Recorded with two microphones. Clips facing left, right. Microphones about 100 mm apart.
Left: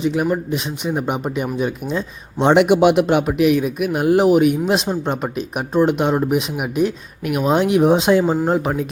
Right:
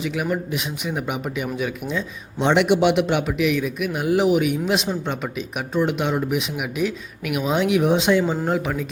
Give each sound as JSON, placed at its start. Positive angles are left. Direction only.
{"t": 0.0, "sound": "speech", "side_deg": 35}